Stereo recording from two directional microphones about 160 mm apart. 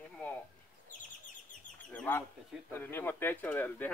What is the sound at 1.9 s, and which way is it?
Speech, 10° left (ahead or behind).